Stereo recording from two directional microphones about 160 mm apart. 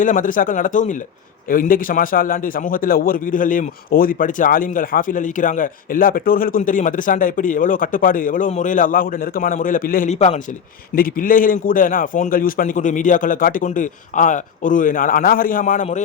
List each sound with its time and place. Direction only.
0.0 s a man's voice: 55° left (ahead or behind)
10.1 s a man's voice: 45° left (ahead or behind)
10.9 s a man's voice: 60° left (ahead or behind)